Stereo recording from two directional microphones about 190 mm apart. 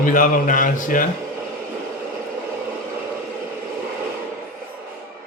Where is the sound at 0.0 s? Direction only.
45° left (ahead or behind).